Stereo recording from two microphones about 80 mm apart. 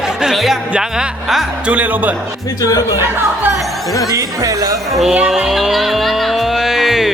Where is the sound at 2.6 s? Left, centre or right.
Left.